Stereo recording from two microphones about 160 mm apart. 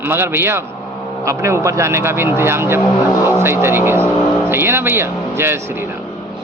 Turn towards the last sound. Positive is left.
turn(degrees=-15)  # may be behind; listen again after turning